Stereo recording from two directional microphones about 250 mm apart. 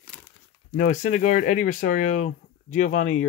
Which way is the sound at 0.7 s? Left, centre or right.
Left.